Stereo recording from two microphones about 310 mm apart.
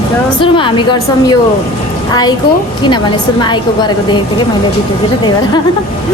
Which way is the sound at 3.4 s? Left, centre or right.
Centre.